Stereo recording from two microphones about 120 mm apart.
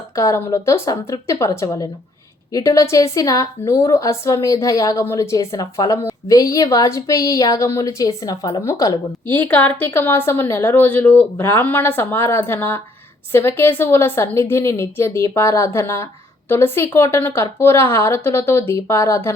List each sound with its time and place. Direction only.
0.2 s speech: 25° left (ahead or behind)
9.3 s a woman's voice: 15° left (ahead or behind)